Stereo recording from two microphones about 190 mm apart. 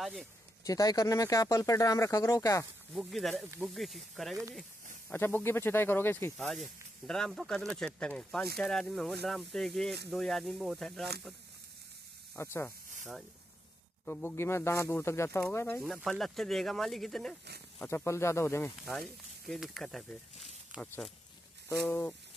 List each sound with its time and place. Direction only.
0.0 s speech: centre (ahead or behind)
0.7 s speech: 20° left (ahead or behind)
2.9 s speech: centre (ahead or behind)
3.4 s speech: 10° right (ahead or behind)
3.7 s speech: centre (ahead or behind)
5.1 s speech: 10° left (ahead or behind)
6.3 s speech: centre (ahead or behind)
12.4 s speech: 15° left (ahead or behind)
14.0 s speech: 10° left (ahead or behind)
15.8 s speech: centre (ahead or behind)
17.7 s speech: 15° left (ahead or behind)
18.9 s speech: centre (ahead or behind)